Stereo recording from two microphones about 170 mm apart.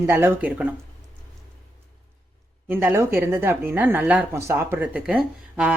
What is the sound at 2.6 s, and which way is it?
Speech, 10° right (ahead or behind).